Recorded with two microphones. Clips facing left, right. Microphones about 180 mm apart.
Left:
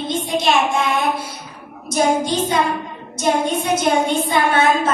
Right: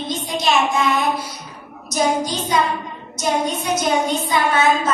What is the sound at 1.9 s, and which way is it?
A woman's voice, 25° left (ahead or behind).